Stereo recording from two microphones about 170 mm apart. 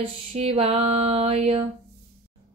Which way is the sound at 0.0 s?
35° right (ahead or behind).